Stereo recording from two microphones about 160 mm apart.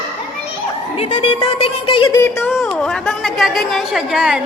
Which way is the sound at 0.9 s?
40° left (ahead or behind).